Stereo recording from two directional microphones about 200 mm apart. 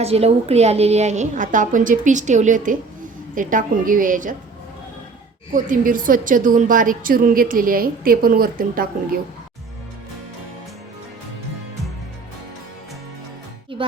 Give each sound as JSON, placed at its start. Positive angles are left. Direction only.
{"t": 0.0, "sound": "a woman's voice", "side_deg": -30}
{"t": 5.5, "sound": "a woman's voice", "side_deg": -40}